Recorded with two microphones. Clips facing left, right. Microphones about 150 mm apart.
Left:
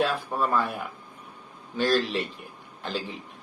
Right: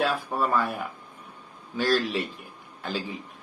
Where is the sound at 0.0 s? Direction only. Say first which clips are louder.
Even; 10° right (ahead or behind).